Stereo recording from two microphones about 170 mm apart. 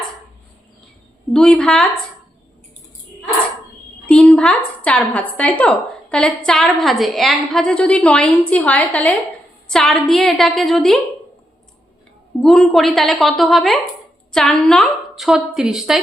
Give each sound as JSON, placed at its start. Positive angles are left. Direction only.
{"t": 1.3, "sound": "a woman's voice", "side_deg": 5}
{"t": 4.0, "sound": "a woman's voice", "side_deg": 5}
{"t": 12.4, "sound": "a woman's voice", "side_deg": 0}